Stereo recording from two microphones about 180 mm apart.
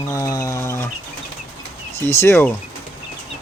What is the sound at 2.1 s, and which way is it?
Speech, 15° left (ahead or behind).